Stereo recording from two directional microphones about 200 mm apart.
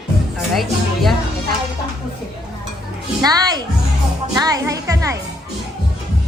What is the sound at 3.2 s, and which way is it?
A woman's voice, 20° right (ahead or behind).